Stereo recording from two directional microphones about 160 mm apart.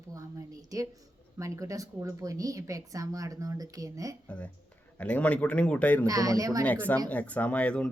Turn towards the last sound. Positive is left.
turn(degrees=5)  # may be behind; listen again after turning